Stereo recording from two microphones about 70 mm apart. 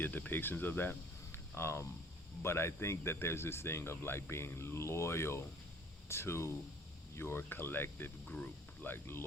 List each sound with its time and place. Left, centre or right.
0.0 s speech: left